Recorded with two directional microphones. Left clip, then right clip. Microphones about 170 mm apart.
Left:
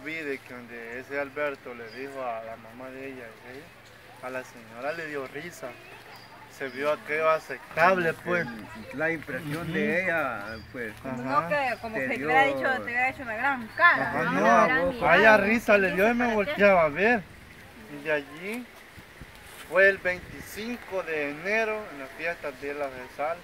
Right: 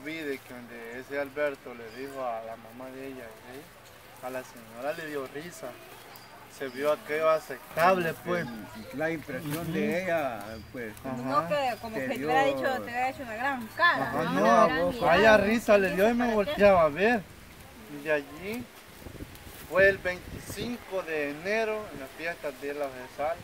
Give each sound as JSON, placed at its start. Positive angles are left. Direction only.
{"t": 0.0, "sound": "boat", "side_deg": 10}
{"t": 0.9, "sound": "speech", "side_deg": 10}
{"t": 4.3, "sound": "speech", "side_deg": 10}
{"t": 8.9, "sound": "speech", "side_deg": -10}
{"t": 11.1, "sound": "speech", "side_deg": 10}
{"t": 11.5, "sound": "speech", "side_deg": -15}
{"t": 14.1, "sound": "speech", "side_deg": 5}
{"t": 19.7, "sound": "speech", "side_deg": 5}